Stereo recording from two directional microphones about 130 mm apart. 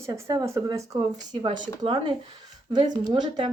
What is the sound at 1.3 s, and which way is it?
Speech, 35° right (ahead or behind).